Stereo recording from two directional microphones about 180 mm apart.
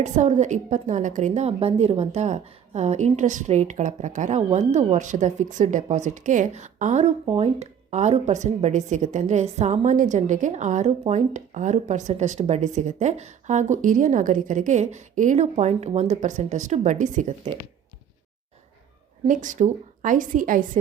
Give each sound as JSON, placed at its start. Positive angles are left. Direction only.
{"t": 0.0, "sound": "speech", "side_deg": -40}
{"t": 19.3, "sound": "a woman's voice", "side_deg": -45}